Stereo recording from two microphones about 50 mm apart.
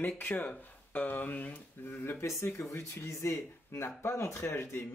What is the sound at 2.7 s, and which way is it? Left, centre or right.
Speech, left.